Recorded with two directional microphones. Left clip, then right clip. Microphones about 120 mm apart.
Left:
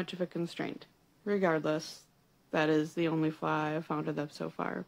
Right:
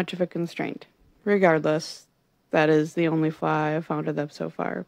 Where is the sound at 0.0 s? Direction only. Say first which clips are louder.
Right 9 dB; 60° right (ahead or behind).